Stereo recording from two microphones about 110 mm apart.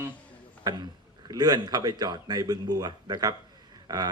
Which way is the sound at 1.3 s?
40° right (ahead or behind).